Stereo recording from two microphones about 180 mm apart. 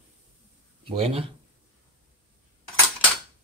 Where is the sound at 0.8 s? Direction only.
30° right (ahead or behind).